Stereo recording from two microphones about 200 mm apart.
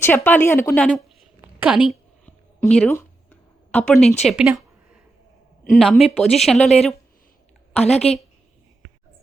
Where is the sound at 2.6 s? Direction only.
5° left (ahead or behind).